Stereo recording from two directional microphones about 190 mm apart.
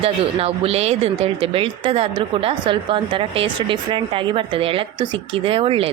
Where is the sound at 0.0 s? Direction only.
30° right (ahead or behind).